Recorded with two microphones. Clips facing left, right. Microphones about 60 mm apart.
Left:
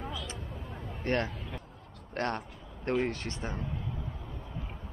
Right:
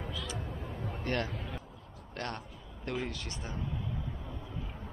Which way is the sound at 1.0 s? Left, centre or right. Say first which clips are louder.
Left 4 dB; left.